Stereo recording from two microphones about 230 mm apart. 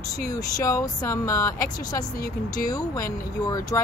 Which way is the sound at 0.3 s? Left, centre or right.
Centre.